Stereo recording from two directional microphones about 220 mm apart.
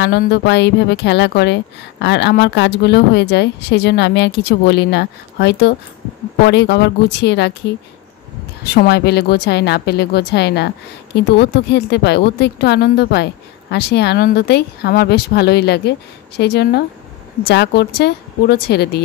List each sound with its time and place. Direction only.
0.0 s speech: 50° left (ahead or behind)